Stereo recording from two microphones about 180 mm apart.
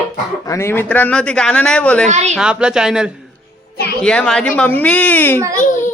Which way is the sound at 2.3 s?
5° right (ahead or behind).